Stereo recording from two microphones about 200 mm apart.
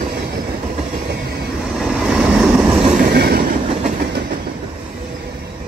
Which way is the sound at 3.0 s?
50° right (ahead or behind).